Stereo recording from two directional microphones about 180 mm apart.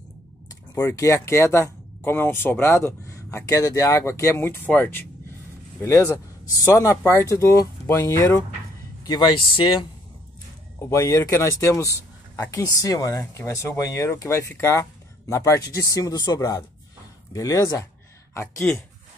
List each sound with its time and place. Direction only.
0.7 s speech: 15° left (ahead or behind)
10.8 s speech: 15° left (ahead or behind)